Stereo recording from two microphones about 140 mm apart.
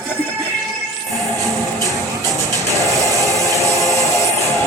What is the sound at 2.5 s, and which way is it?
Music, 25° right (ahead or behind).